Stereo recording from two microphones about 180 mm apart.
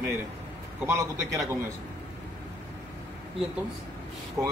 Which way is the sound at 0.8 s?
15° right (ahead or behind).